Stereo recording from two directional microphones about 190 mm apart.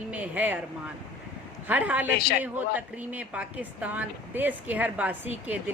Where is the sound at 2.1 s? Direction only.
55° left (ahead or behind).